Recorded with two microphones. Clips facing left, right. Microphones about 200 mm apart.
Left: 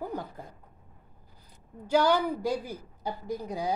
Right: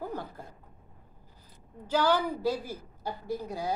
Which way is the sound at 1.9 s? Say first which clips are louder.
Left 2 dB; 10° left (ahead or behind).